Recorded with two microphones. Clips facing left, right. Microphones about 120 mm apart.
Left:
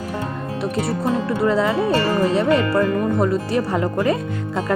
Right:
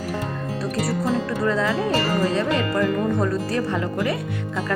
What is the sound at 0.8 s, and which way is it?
Speech, 20° left (ahead or behind).